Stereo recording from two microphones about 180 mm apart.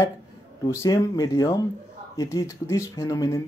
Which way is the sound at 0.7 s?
20° left (ahead or behind).